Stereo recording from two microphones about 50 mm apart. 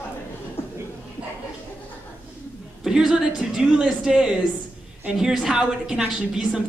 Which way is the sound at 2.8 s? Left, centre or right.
Centre.